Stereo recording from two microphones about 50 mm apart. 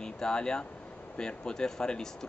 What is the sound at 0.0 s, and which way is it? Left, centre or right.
Speech, centre.